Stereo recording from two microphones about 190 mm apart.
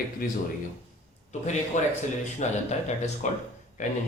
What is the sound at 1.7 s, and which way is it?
Speech, 40° left (ahead or behind).